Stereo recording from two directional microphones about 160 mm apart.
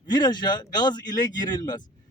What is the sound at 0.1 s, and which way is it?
A man's voice, 25° left (ahead or behind).